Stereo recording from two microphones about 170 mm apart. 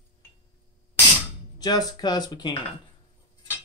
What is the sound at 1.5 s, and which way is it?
Speech, 25° left (ahead or behind).